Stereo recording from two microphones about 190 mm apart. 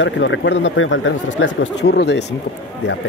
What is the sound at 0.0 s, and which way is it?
Speech, 70° left (ahead or behind).